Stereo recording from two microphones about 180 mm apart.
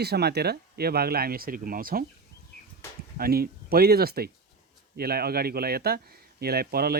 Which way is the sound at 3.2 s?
55° right (ahead or behind).